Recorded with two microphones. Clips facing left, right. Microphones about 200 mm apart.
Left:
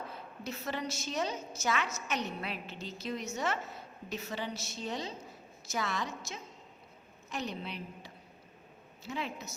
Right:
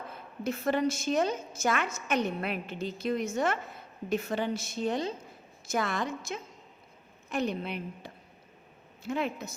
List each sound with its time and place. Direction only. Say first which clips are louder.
0.1 s a woman's voice: right 7 dB; 55° right (ahead or behind)